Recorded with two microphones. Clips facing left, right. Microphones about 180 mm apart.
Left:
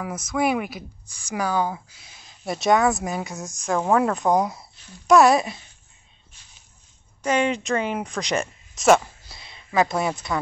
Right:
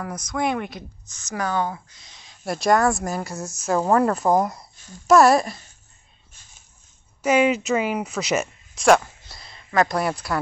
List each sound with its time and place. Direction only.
0.3 s speech: 5° left (ahead or behind)
7.2 s speech: 10° right (ahead or behind)